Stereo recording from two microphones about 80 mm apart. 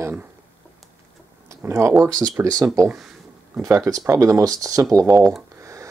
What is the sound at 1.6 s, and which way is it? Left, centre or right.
Speech, right.